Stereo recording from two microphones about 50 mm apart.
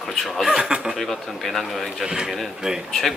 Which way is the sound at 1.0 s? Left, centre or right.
Centre.